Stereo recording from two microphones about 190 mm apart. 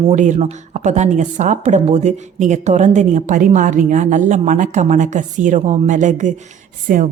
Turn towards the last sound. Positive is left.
turn(degrees=-45)  # may be behind; listen again after turning